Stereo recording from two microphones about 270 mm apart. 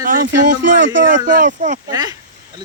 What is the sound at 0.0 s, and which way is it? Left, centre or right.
Speech, right.